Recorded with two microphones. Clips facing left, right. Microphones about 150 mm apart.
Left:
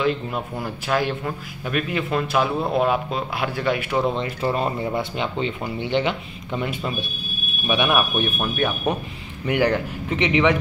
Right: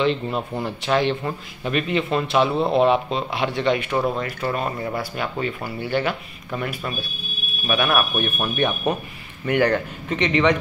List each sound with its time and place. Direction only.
0.0 s a man's voice: 5° left (ahead or behind)
4.2 s speech: 25° left (ahead or behind)
8.5 s a man's voice: 5° left (ahead or behind)